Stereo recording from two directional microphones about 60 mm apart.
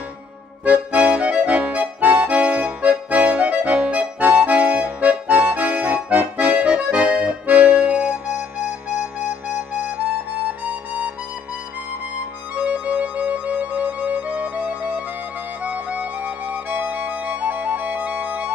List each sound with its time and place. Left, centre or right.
0.7 s accordion: right
10.6 s harmonica: right
12.5 s music: right